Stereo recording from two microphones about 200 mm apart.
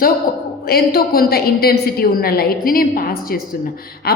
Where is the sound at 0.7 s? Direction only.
50° left (ahead or behind).